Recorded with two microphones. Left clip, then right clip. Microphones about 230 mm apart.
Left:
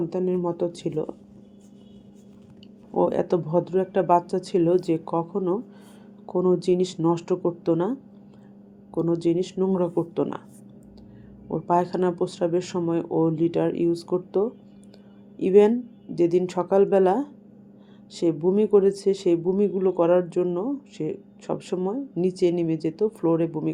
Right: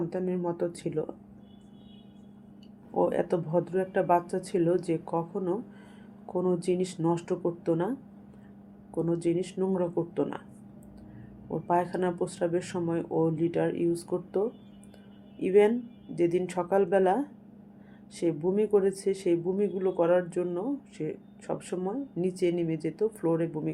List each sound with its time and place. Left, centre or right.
0.1 s speech: centre
2.9 s speech: left
11.5 s speech: centre